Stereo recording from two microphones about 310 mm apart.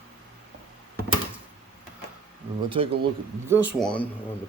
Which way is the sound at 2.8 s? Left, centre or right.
Centre.